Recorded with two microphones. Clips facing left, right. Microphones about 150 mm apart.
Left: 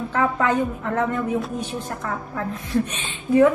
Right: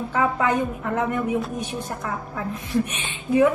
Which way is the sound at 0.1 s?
15° right (ahead or behind).